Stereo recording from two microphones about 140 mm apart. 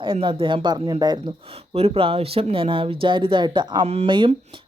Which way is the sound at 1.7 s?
45° right (ahead or behind).